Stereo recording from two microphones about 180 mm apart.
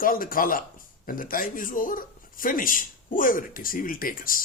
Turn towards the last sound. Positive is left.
turn(degrees=50)  # may be behind; listen again after turning